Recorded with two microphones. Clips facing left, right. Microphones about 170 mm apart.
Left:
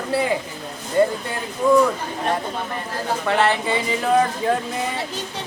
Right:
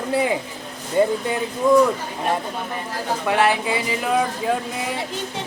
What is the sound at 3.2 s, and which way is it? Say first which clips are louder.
Speech: right 1 dB; 10° right (ahead or behind).